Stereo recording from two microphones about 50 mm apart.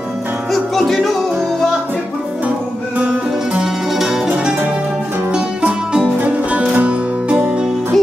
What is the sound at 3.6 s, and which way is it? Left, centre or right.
Music, centre.